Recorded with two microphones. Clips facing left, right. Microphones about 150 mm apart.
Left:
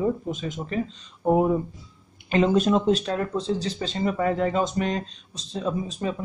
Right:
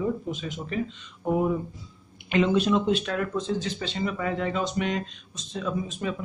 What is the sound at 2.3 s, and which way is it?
Speech, 40° left (ahead or behind).